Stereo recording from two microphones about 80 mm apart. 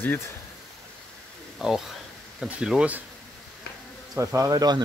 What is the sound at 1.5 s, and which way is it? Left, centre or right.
Speech, centre.